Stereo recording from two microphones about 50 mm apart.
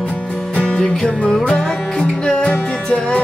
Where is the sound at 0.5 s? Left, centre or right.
Left.